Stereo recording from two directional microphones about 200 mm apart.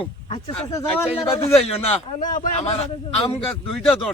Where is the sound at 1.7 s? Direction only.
35° left (ahead or behind).